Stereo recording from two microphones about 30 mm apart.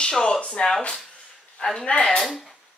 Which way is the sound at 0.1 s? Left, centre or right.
Centre.